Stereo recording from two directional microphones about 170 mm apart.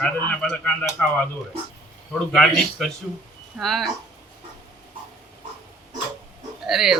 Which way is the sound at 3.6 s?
Centre (ahead or behind).